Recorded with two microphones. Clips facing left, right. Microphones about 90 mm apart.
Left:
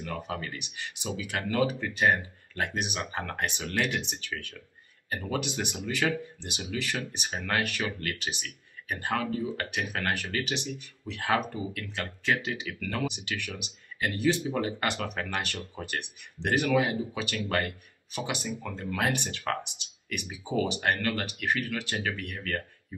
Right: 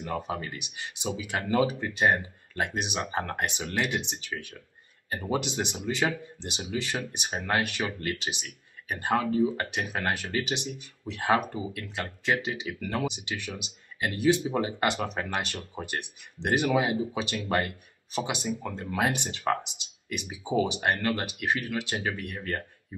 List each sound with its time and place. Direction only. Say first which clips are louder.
0.0 s speech: right 3 dB; 20° right (ahead or behind)